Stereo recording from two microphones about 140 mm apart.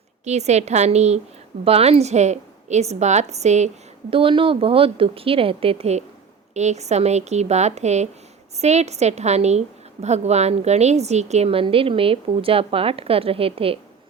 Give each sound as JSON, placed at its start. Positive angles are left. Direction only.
{"t": 0.3, "sound": "a woman's voice", "side_deg": -55}
{"t": 4.1, "sound": "a woman's voice", "side_deg": -40}